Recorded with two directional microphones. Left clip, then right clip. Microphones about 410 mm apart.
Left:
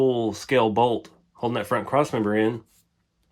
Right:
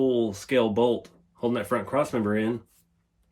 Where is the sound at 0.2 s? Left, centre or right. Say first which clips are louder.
Left 2 dB; centre.